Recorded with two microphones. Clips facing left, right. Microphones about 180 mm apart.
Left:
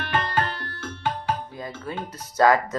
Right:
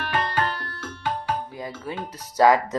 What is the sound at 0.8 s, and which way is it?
Tabla, 25° left (ahead or behind).